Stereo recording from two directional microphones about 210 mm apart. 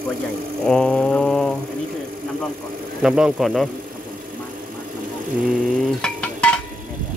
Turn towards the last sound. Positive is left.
turn(degrees=5)  # may be behind; listen again after turning